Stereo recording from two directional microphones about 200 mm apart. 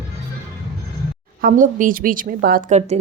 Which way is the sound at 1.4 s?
45° right (ahead or behind).